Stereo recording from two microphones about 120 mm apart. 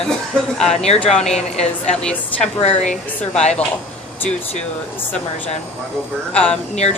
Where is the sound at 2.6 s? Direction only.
75° left (ahead or behind).